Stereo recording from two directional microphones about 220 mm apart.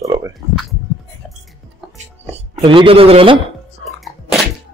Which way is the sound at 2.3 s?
25° right (ahead or behind).